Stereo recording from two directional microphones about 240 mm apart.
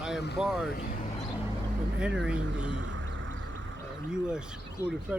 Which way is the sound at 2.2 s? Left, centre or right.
Centre.